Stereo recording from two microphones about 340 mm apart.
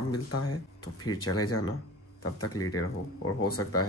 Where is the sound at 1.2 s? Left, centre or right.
Left.